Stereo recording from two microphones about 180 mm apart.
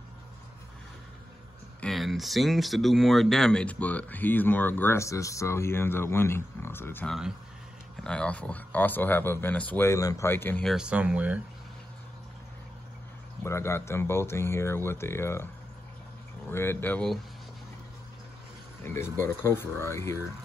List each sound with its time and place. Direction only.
1.8 s speech: centre (ahead or behind)
13.4 s speech: 15° left (ahead or behind)
19.1 s speech: 15° left (ahead or behind)